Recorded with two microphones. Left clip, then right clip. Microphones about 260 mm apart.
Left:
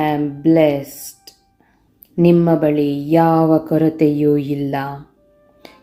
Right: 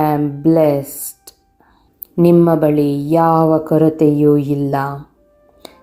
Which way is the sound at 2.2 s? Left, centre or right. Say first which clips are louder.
Right 2 dB; centre.